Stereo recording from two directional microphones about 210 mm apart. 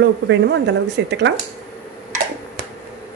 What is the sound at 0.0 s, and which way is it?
Speech, 55° right (ahead or behind).